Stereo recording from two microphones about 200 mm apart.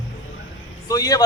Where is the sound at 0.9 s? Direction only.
20° left (ahead or behind).